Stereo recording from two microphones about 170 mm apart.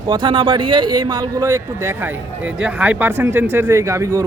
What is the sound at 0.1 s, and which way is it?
Speech, 25° right (ahead or behind).